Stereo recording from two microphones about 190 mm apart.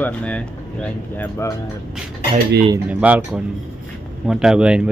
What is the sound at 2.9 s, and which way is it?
A woman's voice, 5° right (ahead or behind).